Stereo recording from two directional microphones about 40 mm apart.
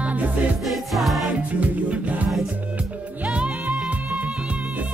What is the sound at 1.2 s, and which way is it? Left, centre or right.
Music, right.